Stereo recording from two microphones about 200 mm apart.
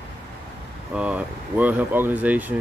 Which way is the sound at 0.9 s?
5° right (ahead or behind).